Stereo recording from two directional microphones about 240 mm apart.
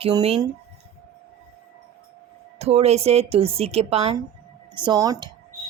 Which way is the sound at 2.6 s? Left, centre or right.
Right.